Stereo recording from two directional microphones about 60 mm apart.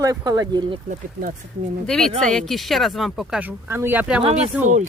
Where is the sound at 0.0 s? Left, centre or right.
Right.